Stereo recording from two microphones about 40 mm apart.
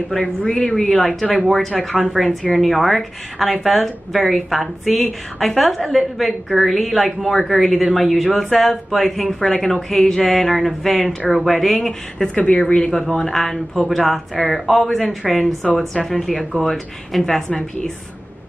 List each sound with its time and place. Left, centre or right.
0.1 s a woman's voice: left; by 11.9 s centre
12.4 s speech: left
13.1 s speech: centre